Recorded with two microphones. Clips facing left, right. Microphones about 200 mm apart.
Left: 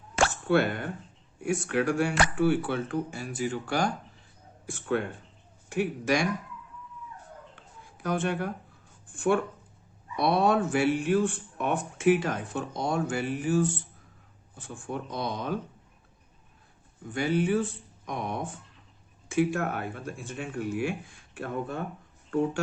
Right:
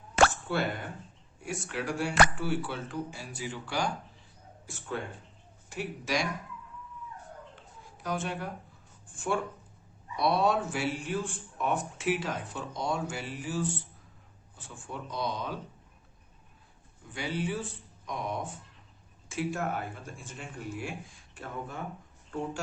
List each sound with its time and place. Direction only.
0.4 s speech: 60° left (ahead or behind)
4.6 s speech: 60° left (ahead or behind)
7.9 s speech: 55° left (ahead or behind)
17.1 s speech: 50° left (ahead or behind)